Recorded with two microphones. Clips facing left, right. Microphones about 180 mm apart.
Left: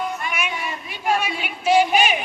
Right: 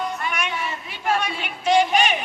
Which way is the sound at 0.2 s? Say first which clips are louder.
Even; 10° left (ahead or behind).